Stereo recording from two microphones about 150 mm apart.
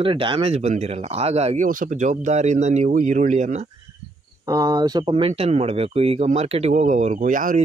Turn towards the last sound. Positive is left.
turn(degrees=-60)  # may be behind; listen again after turning